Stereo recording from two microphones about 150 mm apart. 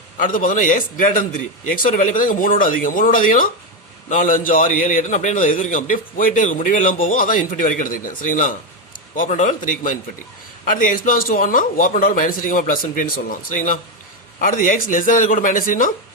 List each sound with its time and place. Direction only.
0.2 s a man's voice: 65° left (ahead or behind)